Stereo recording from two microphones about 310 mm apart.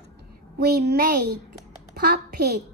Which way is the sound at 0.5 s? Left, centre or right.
Right.